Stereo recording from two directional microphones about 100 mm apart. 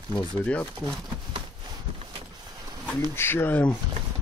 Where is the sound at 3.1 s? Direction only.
20° left (ahead or behind).